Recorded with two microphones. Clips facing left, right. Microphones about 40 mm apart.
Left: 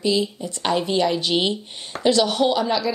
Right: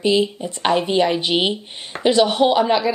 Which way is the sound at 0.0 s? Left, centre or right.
Right.